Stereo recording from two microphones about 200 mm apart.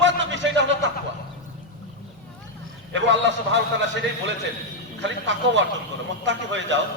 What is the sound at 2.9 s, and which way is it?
A man's voice, 65° right (ahead or behind).